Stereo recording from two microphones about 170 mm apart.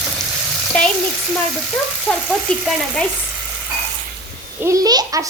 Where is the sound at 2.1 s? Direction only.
5° left (ahead or behind).